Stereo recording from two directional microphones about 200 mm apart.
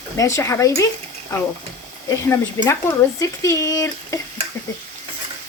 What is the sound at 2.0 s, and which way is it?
Speech, 15° left (ahead or behind).